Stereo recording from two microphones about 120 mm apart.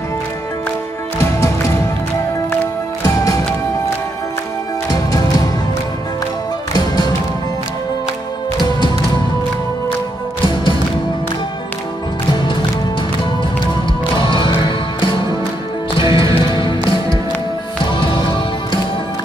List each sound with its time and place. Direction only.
3.2 s music: 30° left (ahead or behind)
4.9 s music: 30° left (ahead or behind)
14.1 s music: 45° left (ahead or behind)
16.1 s music: 30° right (ahead or behind)
17.9 s music: 45° left (ahead or behind)